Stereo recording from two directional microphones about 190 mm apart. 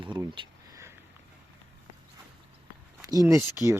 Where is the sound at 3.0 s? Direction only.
20° right (ahead or behind).